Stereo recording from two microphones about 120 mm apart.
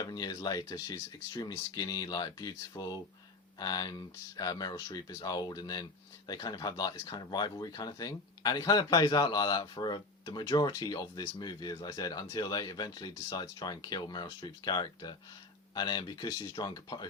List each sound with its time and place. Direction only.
0.0 s speech: 30° left (ahead or behind)